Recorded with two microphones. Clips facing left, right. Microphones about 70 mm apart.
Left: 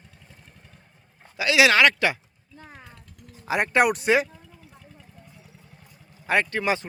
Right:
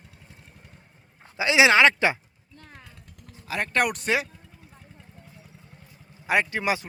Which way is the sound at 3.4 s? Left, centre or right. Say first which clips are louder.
Left 4 dB; centre.